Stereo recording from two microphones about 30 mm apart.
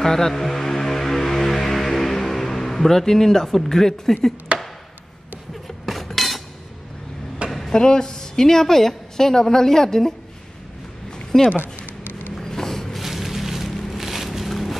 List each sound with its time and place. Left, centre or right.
0.0 s music: centre
3.5 s speech: centre
4.5 s chop: right
5.9 s cutlery: centre
7.4 s a sound: right
7.7 s a woman's voice: left
11.3 s speech: centre
12.4 s a sound: centre
12.9 s a sound: centre